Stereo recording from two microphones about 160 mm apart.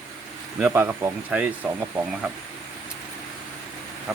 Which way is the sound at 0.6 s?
10° right (ahead or behind).